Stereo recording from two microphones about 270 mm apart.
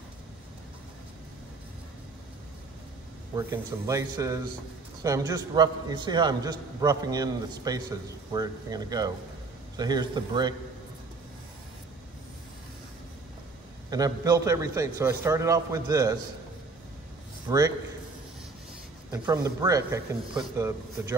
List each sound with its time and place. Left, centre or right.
3.3 s a man's voice: centre
13.8 s a man's voice: centre
17.5 s a man's voice: centre
19.1 s a man's voice: centre